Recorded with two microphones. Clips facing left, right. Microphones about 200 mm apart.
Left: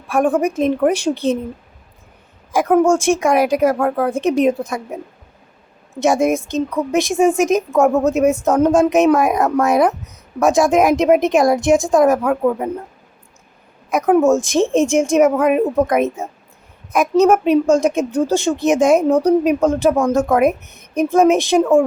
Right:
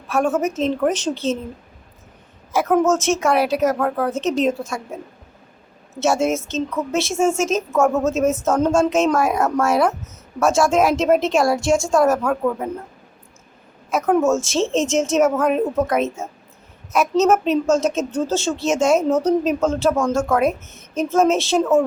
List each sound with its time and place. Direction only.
0.1 s a woman's voice: 15° left (ahead or behind)
2.5 s a woman's voice: 15° left (ahead or behind)
14.2 s a woman's voice: 15° left (ahead or behind)